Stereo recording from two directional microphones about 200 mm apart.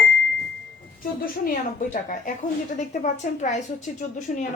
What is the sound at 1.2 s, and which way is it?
A woman's voice, 40° left (ahead or behind).